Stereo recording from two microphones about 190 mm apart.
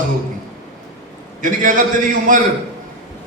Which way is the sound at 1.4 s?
45° right (ahead or behind).